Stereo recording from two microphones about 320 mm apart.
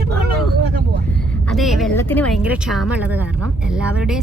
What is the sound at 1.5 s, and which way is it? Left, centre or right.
Speech, centre.